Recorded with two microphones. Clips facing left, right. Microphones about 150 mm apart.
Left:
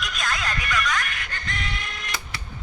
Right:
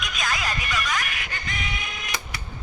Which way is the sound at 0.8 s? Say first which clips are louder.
Left 1 dB; 5° right (ahead or behind).